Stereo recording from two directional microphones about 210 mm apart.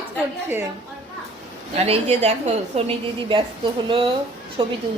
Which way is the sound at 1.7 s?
30° right (ahead or behind).